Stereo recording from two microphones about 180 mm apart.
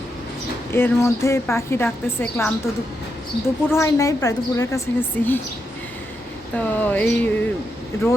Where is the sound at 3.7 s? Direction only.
15° left (ahead or behind).